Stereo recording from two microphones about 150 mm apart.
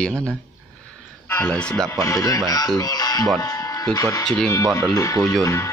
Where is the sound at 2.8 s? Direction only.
25° left (ahead or behind).